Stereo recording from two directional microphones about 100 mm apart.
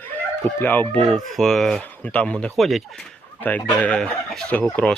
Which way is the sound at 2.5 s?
Centre (ahead or behind).